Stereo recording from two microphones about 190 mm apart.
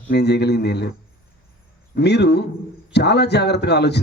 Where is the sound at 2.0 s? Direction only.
60° left (ahead or behind).